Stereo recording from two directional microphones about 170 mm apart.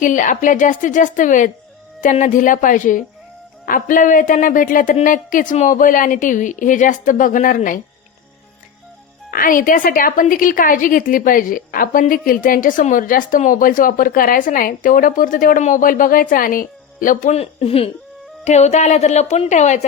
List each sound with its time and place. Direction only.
0.0 s a woman's voice: 50° left (ahead or behind)
9.3 s a woman's voice: 55° left (ahead or behind)